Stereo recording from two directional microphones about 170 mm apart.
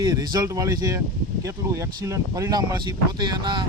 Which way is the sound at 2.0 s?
20° right (ahead or behind).